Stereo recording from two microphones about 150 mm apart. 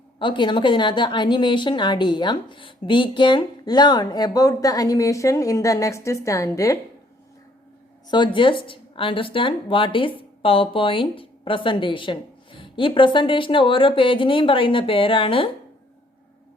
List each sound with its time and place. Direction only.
0.2 s a woman's voice: 30° left (ahead or behind)
8.0 s speech: 30° left (ahead or behind)